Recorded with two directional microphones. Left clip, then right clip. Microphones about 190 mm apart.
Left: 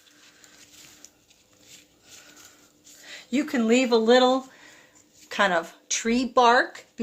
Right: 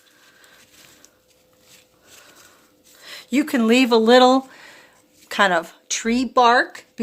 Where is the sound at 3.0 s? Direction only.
35° right (ahead or behind).